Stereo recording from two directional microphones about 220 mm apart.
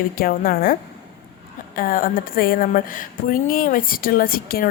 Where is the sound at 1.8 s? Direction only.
40° left (ahead or behind).